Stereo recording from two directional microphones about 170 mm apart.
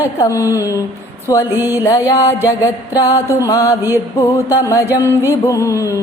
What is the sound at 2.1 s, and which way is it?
Mantra, 20° left (ahead or behind).